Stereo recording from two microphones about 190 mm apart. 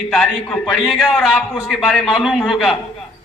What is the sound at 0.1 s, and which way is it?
A man's voice, 5° left (ahead or behind).